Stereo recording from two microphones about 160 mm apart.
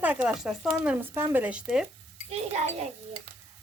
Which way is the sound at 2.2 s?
45° right (ahead or behind).